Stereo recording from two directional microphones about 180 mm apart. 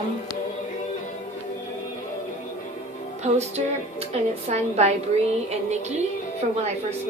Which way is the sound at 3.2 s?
35° right (ahead or behind).